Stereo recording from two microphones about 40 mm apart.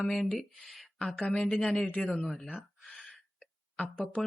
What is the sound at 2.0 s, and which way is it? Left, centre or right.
Speech, centre.